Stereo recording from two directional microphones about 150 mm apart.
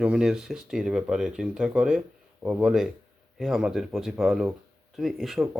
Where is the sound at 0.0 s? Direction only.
5° right (ahead or behind).